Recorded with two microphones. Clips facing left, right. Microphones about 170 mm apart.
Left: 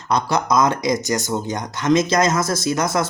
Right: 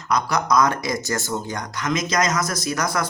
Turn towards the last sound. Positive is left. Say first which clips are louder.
# left 4 dB
turn(degrees=25)  # may be behind; listen again after turning